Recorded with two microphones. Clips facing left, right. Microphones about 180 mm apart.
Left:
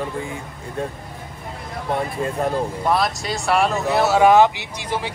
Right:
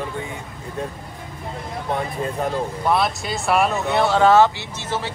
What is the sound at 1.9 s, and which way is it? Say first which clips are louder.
Speech: left 2 dB; centre (ahead or behind).